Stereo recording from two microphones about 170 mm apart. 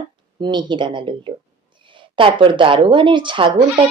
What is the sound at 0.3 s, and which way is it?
A woman's voice, 25° right (ahead or behind).